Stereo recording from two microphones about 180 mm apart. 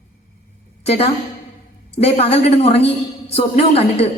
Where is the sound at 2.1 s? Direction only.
35° left (ahead or behind).